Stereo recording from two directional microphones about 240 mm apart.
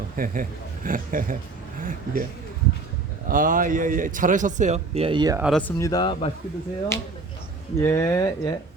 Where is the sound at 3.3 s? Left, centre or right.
Right; by 5.4 s centre.